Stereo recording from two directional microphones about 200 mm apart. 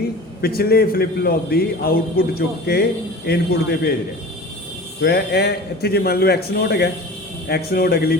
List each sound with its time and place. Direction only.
0.4 s a man's voice: 50° left (ahead or behind)
4.9 s a man's voice: 55° left (ahead or behind)